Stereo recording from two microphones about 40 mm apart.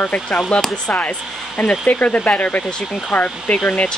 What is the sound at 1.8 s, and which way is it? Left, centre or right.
Speech, left.